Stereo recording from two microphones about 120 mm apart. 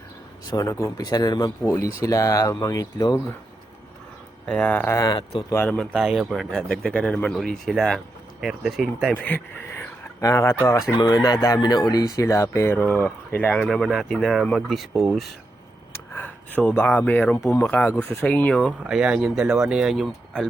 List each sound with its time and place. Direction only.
0.5 s speech: 25° left (ahead or behind)
4.4 s speech: 10° left (ahead or behind)
5.1 s speech: 40° left (ahead or behind)
5.6 s speech: 5° left (ahead or behind)
9.1 s speech: 15° left (ahead or behind)
10.9 s speech: 35° left (ahead or behind); by 13.7 s 15° left (ahead or behind)
13.7 s speech: centre (ahead or behind)
16.1 s speech: 15° left (ahead or behind)
18.9 s speech: 5° right (ahead or behind)